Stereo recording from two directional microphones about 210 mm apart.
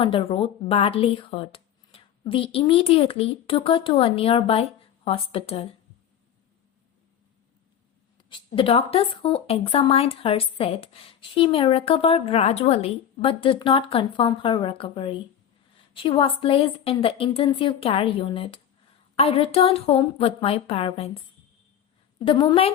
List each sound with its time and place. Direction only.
0.0 s a woman's voice: 25° left (ahead or behind)
8.5 s a woman's voice: 25° left (ahead or behind)
22.2 s a woman's voice: 25° left (ahead or behind)